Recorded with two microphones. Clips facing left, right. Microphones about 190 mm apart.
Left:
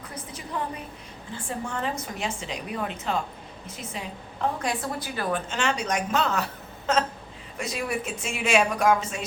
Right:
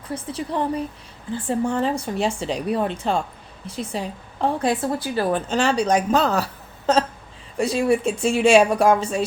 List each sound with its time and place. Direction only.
0.1 s a woman's voice: 30° right (ahead or behind)